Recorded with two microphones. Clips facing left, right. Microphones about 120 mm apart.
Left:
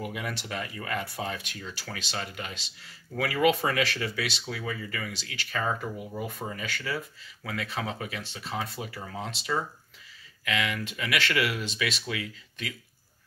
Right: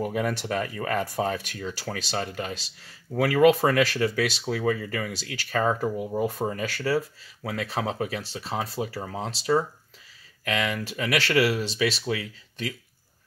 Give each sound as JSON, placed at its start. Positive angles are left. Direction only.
{"t": 0.0, "sound": "speech", "side_deg": -40}